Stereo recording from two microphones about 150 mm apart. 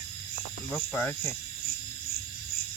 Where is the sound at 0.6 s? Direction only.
10° left (ahead or behind).